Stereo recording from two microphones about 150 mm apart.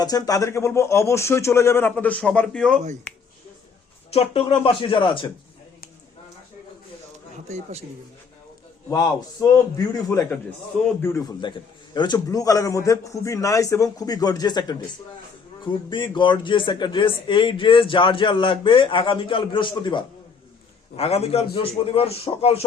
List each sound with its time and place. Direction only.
0.0 s a man's voice: 25° left (ahead or behind); by 2.8 s 5° left (ahead or behind)
4.1 s speech: 40° left (ahead or behind)
7.5 s speech: 45° right (ahead or behind)
8.9 s a man's voice: 25° left (ahead or behind)
20.9 s speech: 45° left (ahead or behind)